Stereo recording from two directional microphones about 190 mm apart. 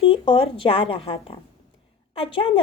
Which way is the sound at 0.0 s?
30° left (ahead or behind).